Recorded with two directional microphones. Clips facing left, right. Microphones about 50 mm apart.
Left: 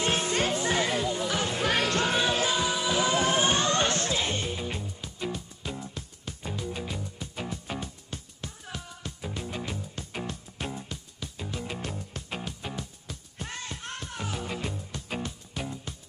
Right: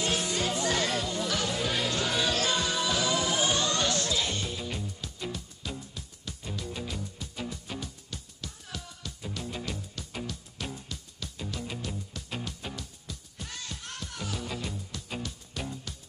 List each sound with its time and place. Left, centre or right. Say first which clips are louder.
0.0 s music: left 3 dB; left
0.7 s music: left 2 dB; centre
1.6 s music: left 4 dB; left
2.0 s music: left 2 dB; left
3.0 s music: left 6 dB; left
13.0 s music: left 3 dB; left
15.5 s music: left 1 dB; centre